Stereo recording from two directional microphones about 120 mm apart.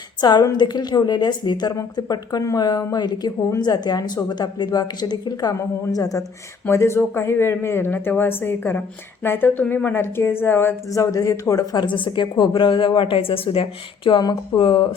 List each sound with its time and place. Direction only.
0.2 s a woman's voice: 35° left (ahead or behind)